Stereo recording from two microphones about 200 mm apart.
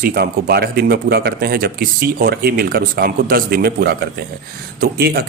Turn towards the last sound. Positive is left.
turn(degrees=-50)  # may be behind; listen again after turning